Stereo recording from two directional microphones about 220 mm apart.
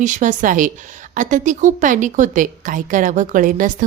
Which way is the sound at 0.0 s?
35° right (ahead or behind).